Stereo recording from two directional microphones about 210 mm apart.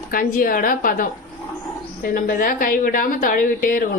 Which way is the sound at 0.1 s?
40° left (ahead or behind).